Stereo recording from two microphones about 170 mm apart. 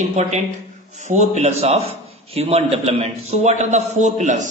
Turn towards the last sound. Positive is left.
turn(degrees=-45)  # may be behind; listen again after turning